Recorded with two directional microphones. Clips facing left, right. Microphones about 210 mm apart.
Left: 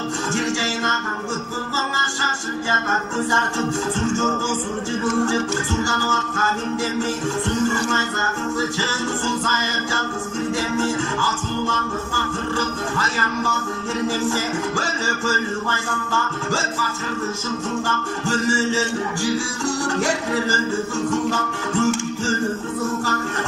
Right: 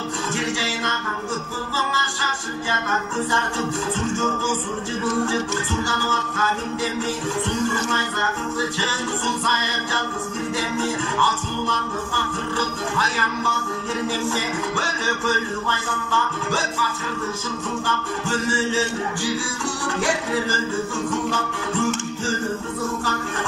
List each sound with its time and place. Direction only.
5.9 s music: 45° left (ahead or behind)
11.1 s music: 45° left (ahead or behind)
17.8 s music: 45° left (ahead or behind)